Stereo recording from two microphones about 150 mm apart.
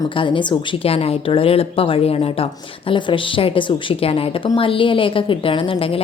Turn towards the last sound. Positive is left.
turn(degrees=40)  # may be behind; listen again after turning